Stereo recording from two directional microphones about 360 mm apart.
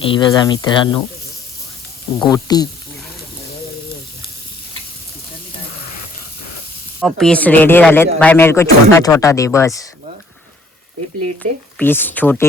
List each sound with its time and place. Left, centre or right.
0.0 s a man's voice: centre
2.2 s a man's voice: centre
7.0 s a man's voice: centre
11.8 s speech: centre